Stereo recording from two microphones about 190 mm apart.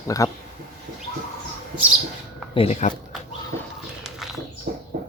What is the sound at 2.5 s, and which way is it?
Speech, 30° left (ahead or behind).